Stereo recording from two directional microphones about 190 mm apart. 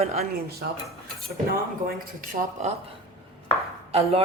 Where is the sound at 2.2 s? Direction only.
40° right (ahead or behind).